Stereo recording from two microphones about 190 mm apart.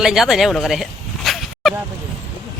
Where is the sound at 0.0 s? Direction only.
Centre (ahead or behind).